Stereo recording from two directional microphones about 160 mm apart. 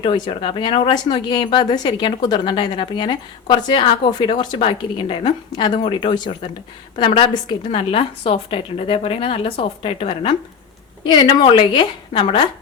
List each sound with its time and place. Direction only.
0.0 s speech: 35° left (ahead or behind)